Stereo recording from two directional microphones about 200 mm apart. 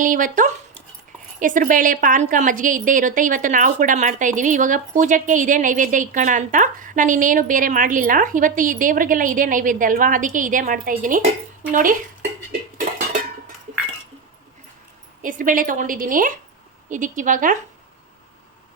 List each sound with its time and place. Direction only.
0.0 s a woman's voice: 40° right (ahead or behind)
15.2 s a woman's voice: 40° right (ahead or behind)